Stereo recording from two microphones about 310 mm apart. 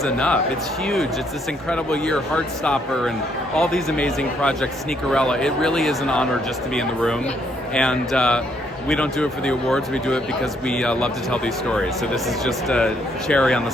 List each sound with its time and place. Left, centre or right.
0.0 s speech: centre
1.7 s speech: centre